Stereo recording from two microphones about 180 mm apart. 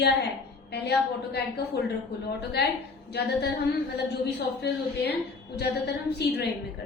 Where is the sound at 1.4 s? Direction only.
65° left (ahead or behind).